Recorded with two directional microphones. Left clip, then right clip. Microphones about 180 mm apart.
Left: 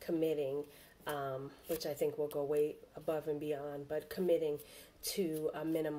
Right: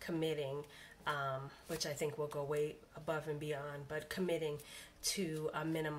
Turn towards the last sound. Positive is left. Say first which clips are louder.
# left 3 dB
turn(degrees=-15)  # may be behind; listen again after turning